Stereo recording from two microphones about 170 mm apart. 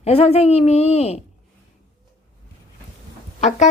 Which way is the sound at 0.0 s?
35° left (ahead or behind).